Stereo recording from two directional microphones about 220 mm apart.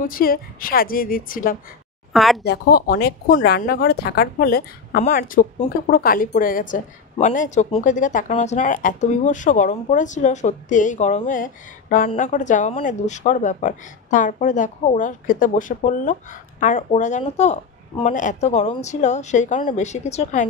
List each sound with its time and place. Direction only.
0.1 s speech: 40° left (ahead or behind)
2.1 s speech: centre (ahead or behind)
2.4 s speech: 45° left (ahead or behind); by 20.4 s 30° left (ahead or behind)